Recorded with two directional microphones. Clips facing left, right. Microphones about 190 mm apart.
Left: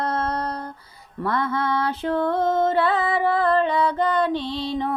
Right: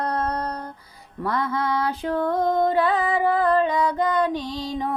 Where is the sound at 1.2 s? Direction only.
15° right (ahead or behind).